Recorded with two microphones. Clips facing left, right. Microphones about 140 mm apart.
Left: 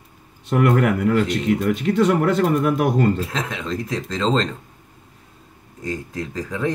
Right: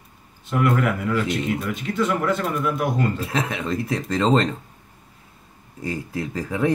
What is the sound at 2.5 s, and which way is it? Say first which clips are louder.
Speech: left 5 dB; 55° left (ahead or behind).